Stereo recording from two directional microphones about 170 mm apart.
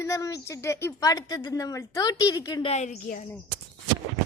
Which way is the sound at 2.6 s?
40° left (ahead or behind).